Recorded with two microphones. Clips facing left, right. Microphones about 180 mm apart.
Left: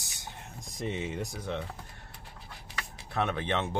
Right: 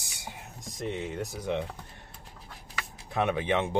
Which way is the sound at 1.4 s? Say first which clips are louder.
Right 8 dB; 15° right (ahead or behind).